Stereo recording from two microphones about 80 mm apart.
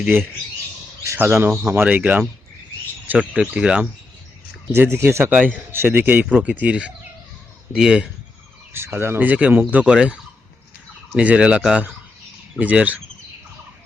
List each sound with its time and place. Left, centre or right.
1.0 s speech: right
4.7 s speech: right; by 8.0 s centre
8.7 s speech: right